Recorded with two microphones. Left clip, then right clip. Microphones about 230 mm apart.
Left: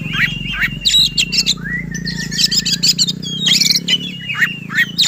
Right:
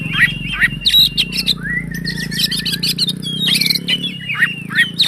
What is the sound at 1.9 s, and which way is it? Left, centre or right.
Bird, right.